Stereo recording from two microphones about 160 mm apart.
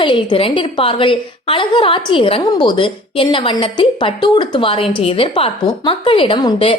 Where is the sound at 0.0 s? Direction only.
30° left (ahead or behind).